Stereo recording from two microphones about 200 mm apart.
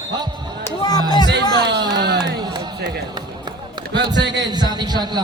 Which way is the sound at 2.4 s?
20° right (ahead or behind).